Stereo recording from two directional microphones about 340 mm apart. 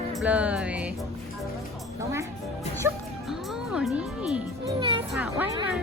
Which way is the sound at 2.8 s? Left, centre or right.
Centre.